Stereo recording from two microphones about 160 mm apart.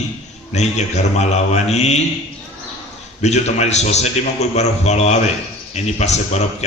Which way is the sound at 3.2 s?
45° left (ahead or behind).